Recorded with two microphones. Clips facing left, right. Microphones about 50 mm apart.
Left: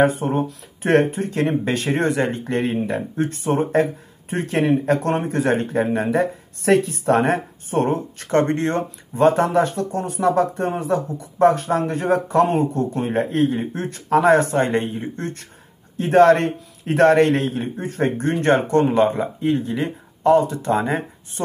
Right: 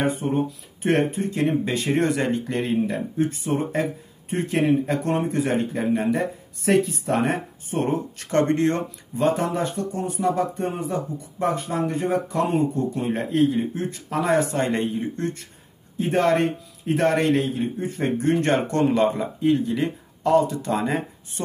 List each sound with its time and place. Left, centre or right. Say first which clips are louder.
0.3 s speech: left 2 dB; left
1.9 s a man's voice: left 1 dB; left
3.3 s speech: left 4 dB; left
9.2 s a man's voice: left 6 dB; left
16.0 s a man's voice: left 6 dB; left